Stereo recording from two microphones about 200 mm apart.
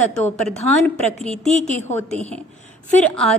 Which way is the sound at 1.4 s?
35° left (ahead or behind).